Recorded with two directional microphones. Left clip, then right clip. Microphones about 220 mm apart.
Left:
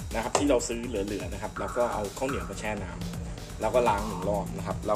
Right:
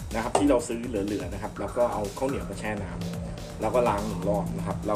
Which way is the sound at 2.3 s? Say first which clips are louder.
Right 1 dB; 15° left (ahead or behind).